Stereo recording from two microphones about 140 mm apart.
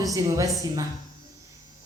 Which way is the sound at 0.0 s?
25° right (ahead or behind).